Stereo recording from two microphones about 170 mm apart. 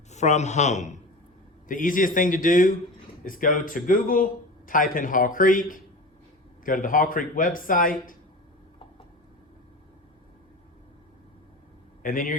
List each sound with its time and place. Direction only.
0.1 s a man's voice: 40° left (ahead or behind)
12.0 s a man's voice: 55° left (ahead or behind)